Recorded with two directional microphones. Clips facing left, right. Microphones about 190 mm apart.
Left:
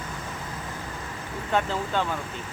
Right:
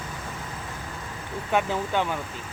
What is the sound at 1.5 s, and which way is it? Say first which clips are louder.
Speech: right 1 dB; 10° right (ahead or behind).